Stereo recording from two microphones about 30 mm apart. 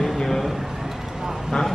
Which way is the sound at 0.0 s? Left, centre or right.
Centre.